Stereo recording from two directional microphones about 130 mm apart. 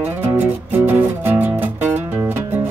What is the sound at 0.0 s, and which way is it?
Music, 15° right (ahead or behind).